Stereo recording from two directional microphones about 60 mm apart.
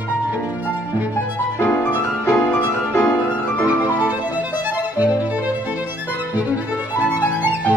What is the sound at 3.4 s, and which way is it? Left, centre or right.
Music, left.